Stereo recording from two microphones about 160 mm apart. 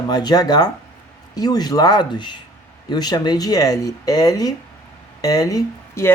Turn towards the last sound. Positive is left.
turn(degrees=20)  # may be behind; listen again after turning